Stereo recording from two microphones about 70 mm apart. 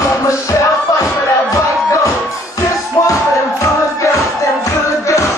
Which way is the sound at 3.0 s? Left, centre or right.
Left.